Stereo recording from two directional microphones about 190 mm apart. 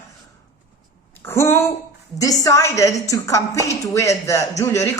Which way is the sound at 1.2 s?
15° left (ahead or behind).